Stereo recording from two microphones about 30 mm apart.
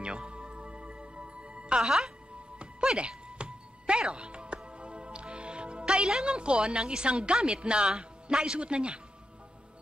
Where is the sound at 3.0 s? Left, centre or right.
Right.